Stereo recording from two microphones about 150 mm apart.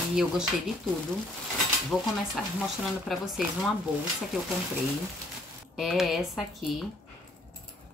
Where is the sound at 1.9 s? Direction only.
5° left (ahead or behind).